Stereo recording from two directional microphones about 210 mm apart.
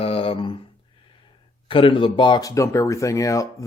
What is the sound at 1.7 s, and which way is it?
Speech, 25° left (ahead or behind).